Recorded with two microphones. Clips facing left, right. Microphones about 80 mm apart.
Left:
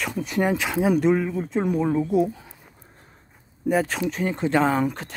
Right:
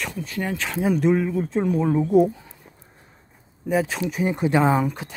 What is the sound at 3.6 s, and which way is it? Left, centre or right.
Speech, centre.